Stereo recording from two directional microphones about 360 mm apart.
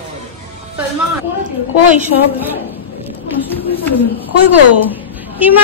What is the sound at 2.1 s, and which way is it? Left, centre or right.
Speech, left.